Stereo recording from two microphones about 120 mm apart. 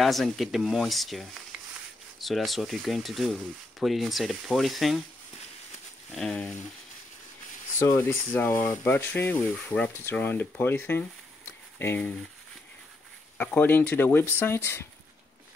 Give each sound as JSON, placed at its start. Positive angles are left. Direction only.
{"t": 0.0, "sound": "speech", "side_deg": 0}
{"t": 6.1, "sound": "speech", "side_deg": 5}
{"t": 7.8, "sound": "speech", "side_deg": 25}
{"t": 13.4, "sound": "speech", "side_deg": 15}